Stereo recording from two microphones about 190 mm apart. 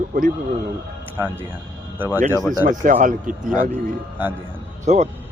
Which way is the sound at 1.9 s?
10° right (ahead or behind).